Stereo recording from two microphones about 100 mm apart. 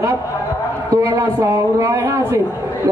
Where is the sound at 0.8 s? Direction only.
30° right (ahead or behind).